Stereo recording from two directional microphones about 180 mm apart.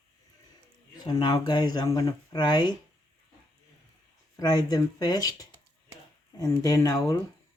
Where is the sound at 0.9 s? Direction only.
20° left (ahead or behind).